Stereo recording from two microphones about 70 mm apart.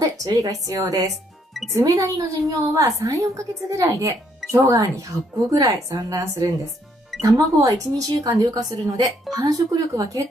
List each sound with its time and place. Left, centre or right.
0.0 s a woman's voice: right
8.3 s a woman's voice: right